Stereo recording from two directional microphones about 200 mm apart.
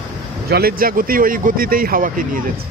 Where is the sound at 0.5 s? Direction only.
50° right (ahead or behind).